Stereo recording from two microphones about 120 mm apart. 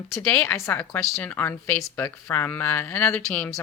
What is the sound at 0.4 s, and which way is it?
A woman's voice, 20° left (ahead or behind).